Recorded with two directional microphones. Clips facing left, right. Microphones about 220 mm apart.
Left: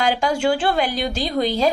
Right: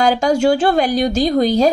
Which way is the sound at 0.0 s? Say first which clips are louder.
Right 6 dB; 45° right (ahead or behind).